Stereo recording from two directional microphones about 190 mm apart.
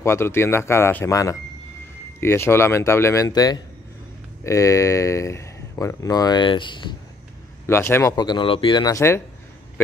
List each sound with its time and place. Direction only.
0.0 s speech: 15° left (ahead or behind)
7.6 s speech: 15° left (ahead or behind)